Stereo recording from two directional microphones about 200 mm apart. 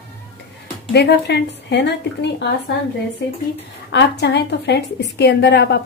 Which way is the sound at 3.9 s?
60° left (ahead or behind).